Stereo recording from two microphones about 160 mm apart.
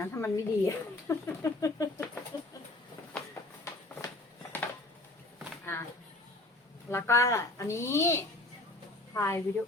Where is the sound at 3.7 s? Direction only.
20° left (ahead or behind).